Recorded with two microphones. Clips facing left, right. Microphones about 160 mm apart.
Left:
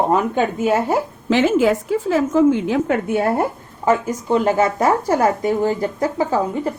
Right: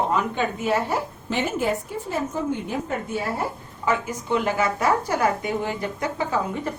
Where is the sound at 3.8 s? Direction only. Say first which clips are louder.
Left 7 dB; 35° left (ahead or behind).